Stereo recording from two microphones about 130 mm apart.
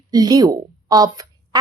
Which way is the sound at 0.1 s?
30° right (ahead or behind).